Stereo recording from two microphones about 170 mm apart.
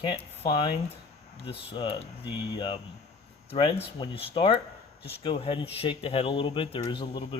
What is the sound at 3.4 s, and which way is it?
Speech, 30° left (ahead or behind).